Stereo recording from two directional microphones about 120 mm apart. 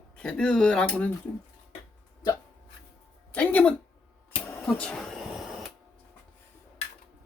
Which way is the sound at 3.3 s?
10° left (ahead or behind).